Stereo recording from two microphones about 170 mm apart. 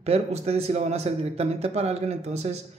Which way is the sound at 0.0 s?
40° right (ahead or behind).